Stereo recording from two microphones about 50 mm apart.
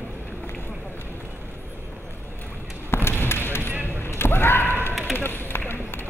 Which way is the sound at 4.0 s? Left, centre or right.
Left.